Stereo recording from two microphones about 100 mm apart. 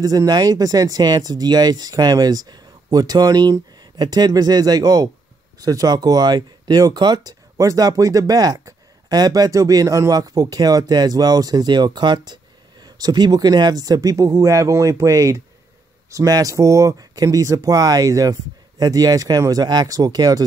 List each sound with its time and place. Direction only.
0.0 s speech: 35° right (ahead or behind)